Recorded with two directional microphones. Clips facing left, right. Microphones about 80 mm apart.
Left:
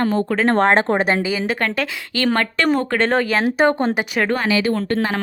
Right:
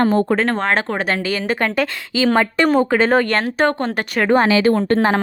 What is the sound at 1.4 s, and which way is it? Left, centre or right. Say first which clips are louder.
A woman's voice: right 2 dB; centre.